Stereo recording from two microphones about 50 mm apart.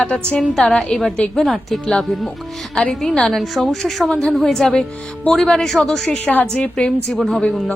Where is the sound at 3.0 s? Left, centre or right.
Centre.